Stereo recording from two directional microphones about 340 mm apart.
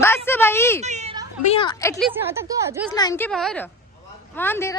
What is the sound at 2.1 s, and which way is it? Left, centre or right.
Speech, centre.